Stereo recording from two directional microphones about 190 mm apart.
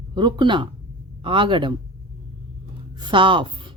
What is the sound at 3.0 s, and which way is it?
Speech, 25° right (ahead or behind).